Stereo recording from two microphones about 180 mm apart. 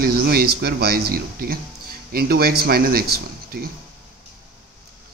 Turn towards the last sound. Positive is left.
turn(degrees=-55)  # may be behind; listen again after turning